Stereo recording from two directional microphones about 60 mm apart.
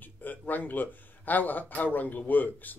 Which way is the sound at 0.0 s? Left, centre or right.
Left.